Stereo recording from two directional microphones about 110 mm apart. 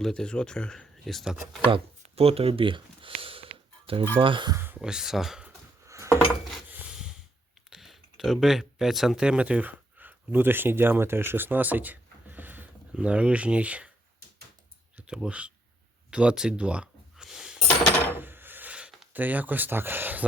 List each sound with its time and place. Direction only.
0.0 s speech: 5° left (ahead or behind)
1.6 s a sound: 55° right (ahead or behind)
4.2 s speech: 50° right (ahead or behind)
4.5 s speech: 20° right (ahead or behind)
4.8 s speech: 5° right (ahead or behind)
5.8 s dishes: 25° right (ahead or behind)
7.7 s speech: centre (ahead or behind)
14.9 s speech: 10° right (ahead or behind)
16.0 s a sound: 10° right (ahead or behind)
18.2 s a sound: 20° right (ahead or behind)